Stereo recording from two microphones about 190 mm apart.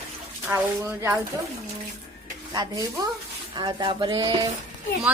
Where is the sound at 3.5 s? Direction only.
25° right (ahead or behind).